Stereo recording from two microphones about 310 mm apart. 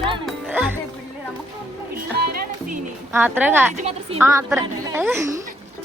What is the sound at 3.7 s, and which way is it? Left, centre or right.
Speech, right.